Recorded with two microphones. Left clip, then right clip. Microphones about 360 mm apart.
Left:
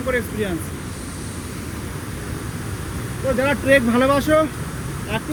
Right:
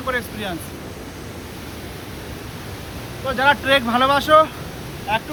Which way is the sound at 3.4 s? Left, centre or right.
Centre.